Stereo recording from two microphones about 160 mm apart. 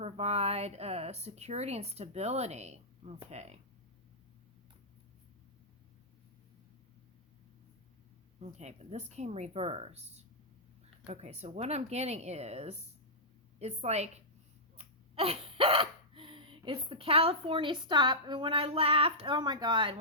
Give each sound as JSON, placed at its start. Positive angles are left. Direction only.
{"t": 0.0, "sound": "a woman's voice", "side_deg": -40}
{"t": 8.4, "sound": "a woman's voice", "side_deg": -45}
{"t": 14.8, "sound": "hiccup", "side_deg": -40}